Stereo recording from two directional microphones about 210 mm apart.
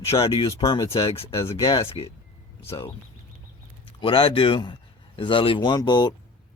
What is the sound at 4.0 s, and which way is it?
Speech, 25° left (ahead or behind).